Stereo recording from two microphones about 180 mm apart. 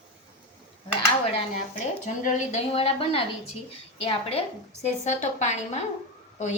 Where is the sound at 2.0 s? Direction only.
45° left (ahead or behind).